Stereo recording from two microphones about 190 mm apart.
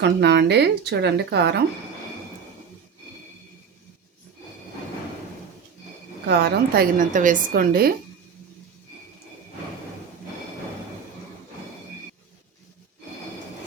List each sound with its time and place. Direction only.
0.0 s speech: 65° right (ahead or behind)
6.2 s a woman's voice: 60° right (ahead or behind)